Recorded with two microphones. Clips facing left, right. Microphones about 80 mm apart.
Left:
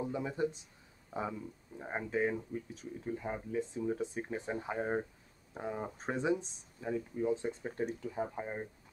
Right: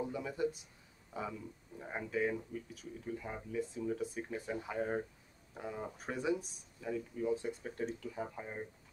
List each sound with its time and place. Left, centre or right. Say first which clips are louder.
0.0 s speech: left 2 dB; left